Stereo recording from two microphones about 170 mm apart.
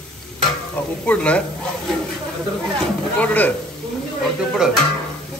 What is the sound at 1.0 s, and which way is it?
Speech, 10° left (ahead or behind).